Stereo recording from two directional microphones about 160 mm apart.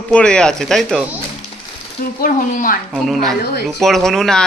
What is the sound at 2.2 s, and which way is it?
Speech, 60° left (ahead or behind).